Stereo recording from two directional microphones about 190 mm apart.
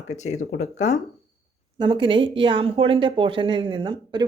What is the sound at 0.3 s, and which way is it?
Speech, 40° left (ahead or behind).